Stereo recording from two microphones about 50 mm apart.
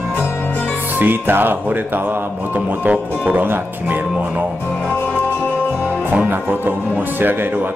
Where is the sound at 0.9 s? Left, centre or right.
Right.